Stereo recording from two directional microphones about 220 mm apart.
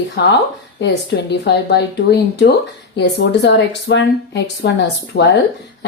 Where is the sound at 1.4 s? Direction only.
50° left (ahead or behind).